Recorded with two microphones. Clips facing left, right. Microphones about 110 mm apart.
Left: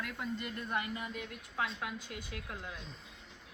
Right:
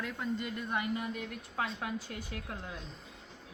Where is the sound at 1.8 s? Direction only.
40° right (ahead or behind).